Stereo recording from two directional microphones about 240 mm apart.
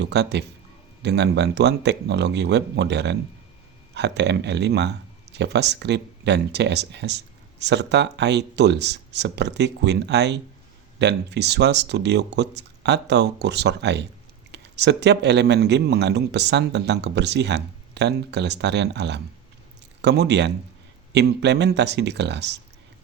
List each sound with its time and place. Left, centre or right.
0.0 s speech: right